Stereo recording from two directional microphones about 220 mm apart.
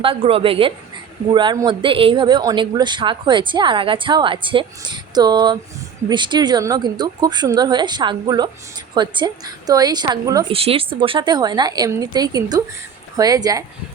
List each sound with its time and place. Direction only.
0.0 s a woman's voice: 25° right (ahead or behind)